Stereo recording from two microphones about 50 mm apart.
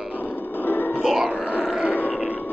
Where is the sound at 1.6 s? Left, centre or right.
Centre.